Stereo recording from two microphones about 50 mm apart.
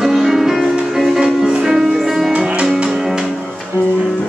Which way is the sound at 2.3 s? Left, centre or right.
Right.